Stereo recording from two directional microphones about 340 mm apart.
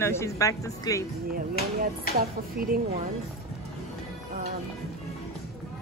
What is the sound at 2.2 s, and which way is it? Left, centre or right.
Speech, right.